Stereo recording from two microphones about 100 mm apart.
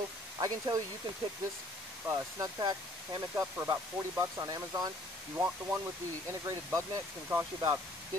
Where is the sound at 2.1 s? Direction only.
35° right (ahead or behind).